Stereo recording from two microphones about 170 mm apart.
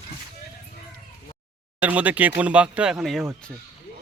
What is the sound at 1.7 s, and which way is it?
A man's voice, 10° right (ahead or behind).